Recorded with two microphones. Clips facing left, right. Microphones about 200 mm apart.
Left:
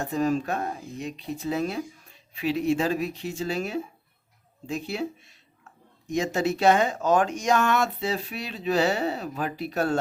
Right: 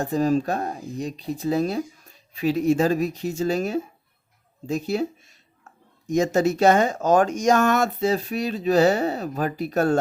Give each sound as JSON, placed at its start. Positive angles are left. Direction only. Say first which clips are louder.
{"t": 0.0, "sound": "speech", "louder": "right 4 dB", "side_deg": -35}